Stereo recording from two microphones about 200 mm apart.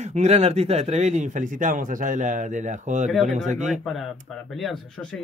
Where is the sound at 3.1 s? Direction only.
Centre (ahead or behind).